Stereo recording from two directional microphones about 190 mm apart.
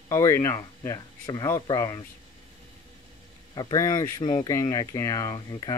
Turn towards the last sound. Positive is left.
turn(degrees=20)  # may be behind; listen again after turning